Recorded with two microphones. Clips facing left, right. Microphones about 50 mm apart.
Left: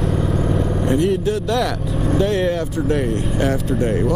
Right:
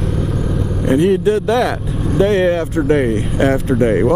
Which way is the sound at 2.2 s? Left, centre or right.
Centre.